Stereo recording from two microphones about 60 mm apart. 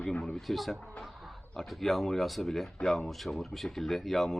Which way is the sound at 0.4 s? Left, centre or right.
Centre.